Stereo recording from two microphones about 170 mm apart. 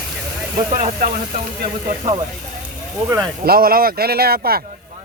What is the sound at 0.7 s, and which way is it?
Speech, 55° right (ahead or behind).